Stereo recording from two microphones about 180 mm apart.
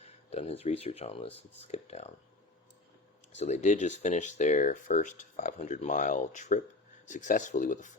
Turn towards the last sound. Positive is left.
turn(degrees=45)  # may be behind; listen again after turning